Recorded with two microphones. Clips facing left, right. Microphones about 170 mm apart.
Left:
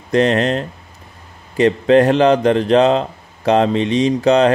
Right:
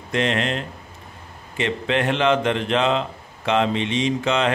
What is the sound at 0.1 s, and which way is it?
Speech, 40° left (ahead or behind).